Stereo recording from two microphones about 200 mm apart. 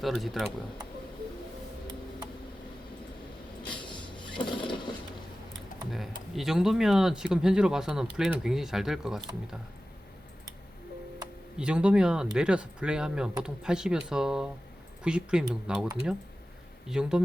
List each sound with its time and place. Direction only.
0.0 s speech: centre (ahead or behind)
3.7 s printer: 25° left (ahead or behind)
5.9 s speech: centre (ahead or behind)
11.5 s speech: 5° right (ahead or behind)
16.9 s speech: 5° right (ahead or behind)